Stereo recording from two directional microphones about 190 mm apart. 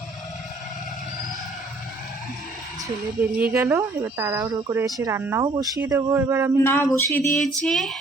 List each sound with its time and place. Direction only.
2.8 s speech: 10° right (ahead or behind)
6.6 s a sound: 10° left (ahead or behind)
7.4 s female singing: centre (ahead or behind)